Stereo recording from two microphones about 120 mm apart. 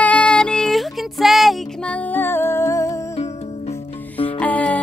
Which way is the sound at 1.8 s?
15° left (ahead or behind).